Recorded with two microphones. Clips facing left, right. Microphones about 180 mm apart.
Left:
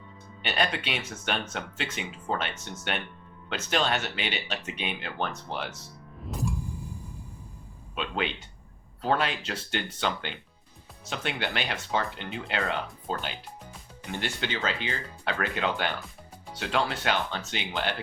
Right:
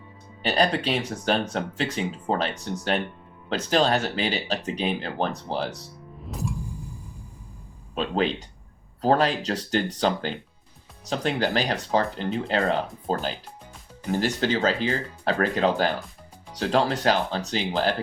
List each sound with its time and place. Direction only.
0.4 s speech: 35° right (ahead or behind)
6.2 s music: centre (ahead or behind)
7.9 s speech: 35° right (ahead or behind)